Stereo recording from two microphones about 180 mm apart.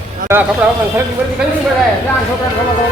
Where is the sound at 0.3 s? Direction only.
10° right (ahead or behind).